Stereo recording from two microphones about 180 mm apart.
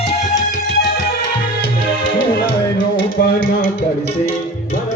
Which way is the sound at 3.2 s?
50° left (ahead or behind).